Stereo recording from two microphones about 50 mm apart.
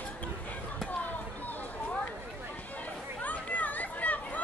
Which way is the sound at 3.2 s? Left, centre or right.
Left.